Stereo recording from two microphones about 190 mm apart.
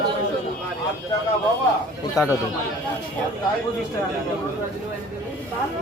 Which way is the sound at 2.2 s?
20° left (ahead or behind).